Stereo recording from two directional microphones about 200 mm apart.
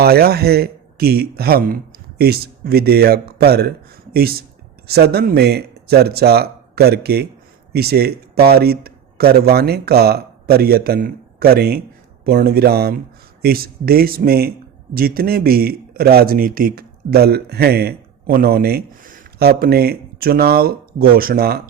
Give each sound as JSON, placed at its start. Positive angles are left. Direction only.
{"t": 0.0, "sound": "a man's voice", "side_deg": -50}